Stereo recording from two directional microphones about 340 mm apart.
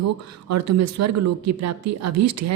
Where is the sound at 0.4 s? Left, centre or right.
Right.